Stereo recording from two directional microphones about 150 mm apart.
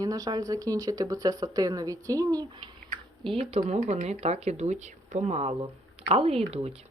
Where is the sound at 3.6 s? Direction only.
50° right (ahead or behind).